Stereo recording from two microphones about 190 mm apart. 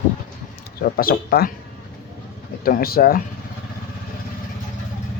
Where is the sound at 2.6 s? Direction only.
50° left (ahead or behind).